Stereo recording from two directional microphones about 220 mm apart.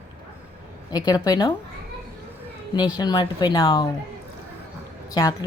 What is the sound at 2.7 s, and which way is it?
Speech, 20° left (ahead or behind).